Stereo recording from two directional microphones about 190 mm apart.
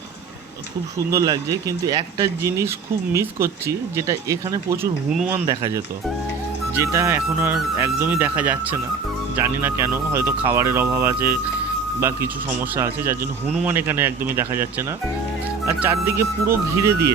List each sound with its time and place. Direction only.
0.9 s speech: 15° right (ahead or behind)
5.5 s speech: 15° right (ahead or behind)